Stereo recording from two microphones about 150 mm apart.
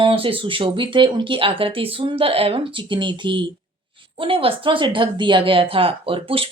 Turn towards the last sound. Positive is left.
turn(degrees=-40)  # may be behind; listen again after turning